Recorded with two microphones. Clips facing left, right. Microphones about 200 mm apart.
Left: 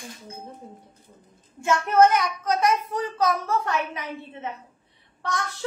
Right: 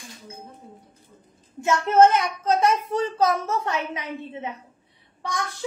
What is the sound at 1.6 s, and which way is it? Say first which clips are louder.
A child's voice: right 2 dB; 20° right (ahead or behind).